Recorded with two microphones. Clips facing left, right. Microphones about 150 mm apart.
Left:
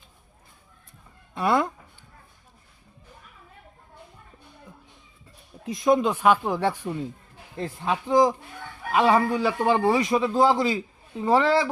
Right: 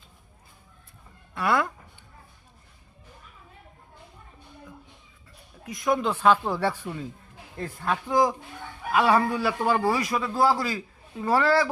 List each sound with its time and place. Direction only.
1.3 s speech: 20° left (ahead or behind)
5.6 s a man's voice: 25° left (ahead or behind)